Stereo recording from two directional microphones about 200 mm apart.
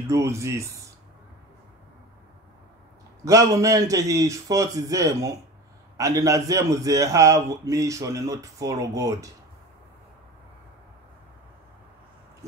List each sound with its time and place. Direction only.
0.1 s a man's voice: 15° right (ahead or behind)
3.3 s a man's voice: 15° right (ahead or behind)